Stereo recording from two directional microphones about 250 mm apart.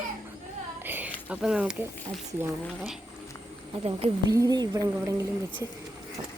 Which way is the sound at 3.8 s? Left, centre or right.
Right.